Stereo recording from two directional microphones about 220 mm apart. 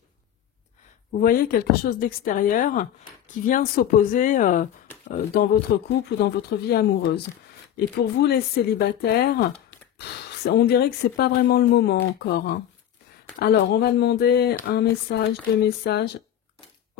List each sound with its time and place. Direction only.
1.2 s speech: 40° left (ahead or behind)